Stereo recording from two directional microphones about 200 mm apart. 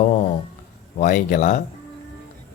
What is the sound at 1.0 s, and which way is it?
Speech, 40° left (ahead or behind).